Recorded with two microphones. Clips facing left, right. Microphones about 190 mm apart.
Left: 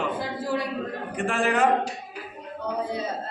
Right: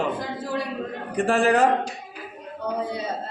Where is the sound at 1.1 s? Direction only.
35° right (ahead or behind).